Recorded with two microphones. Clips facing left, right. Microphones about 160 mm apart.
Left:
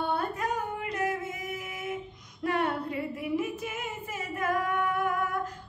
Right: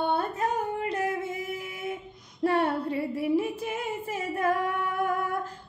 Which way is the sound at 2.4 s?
30° right (ahead or behind).